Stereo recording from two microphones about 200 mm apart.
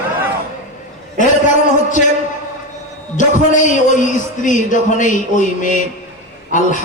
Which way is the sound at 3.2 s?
40° left (ahead or behind).